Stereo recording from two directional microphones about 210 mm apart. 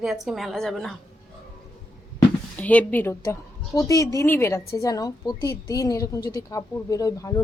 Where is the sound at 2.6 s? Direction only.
5° left (ahead or behind).